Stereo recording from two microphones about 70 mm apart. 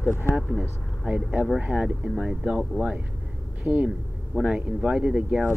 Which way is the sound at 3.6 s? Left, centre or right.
Right.